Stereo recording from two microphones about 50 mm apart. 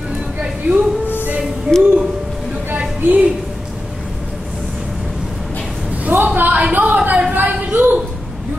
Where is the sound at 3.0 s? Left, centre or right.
Right.